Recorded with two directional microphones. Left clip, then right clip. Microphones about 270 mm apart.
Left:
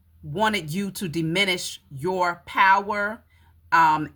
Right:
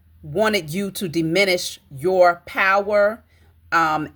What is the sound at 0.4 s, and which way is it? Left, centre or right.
Speech, centre.